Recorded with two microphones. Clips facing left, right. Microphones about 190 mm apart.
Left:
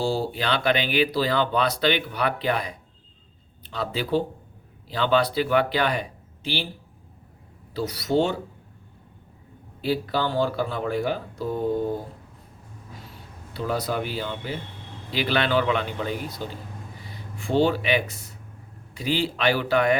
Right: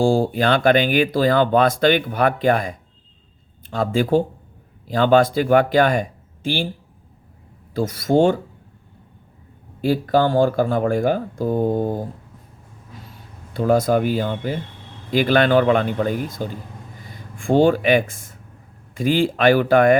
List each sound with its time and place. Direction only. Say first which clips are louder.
0.0 s speech: right 8 dB; 50° right (ahead or behind)
7.7 s speech: right 6 dB; 45° right (ahead or behind)
9.8 s speech: right 7 dB; 45° right (ahead or behind)
13.5 s speech: right 10 dB; 45° right (ahead or behind)